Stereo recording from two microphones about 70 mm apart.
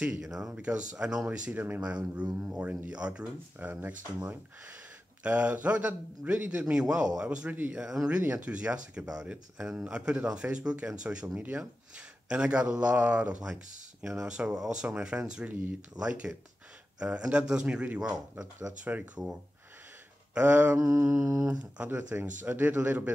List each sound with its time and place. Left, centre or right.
0.0 s a man's voice: centre
15.4 s a man's voice: right
20.3 s a man's voice: right
21.2 s mantra: right
21.5 s a man's voice: right